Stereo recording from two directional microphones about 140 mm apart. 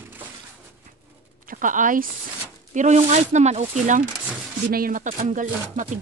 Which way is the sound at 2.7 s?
60° right (ahead or behind).